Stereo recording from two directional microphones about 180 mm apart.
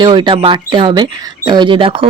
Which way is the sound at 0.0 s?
25° right (ahead or behind).